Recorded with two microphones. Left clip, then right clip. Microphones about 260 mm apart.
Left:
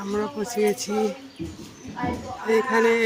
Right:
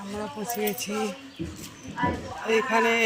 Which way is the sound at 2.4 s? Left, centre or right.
Centre.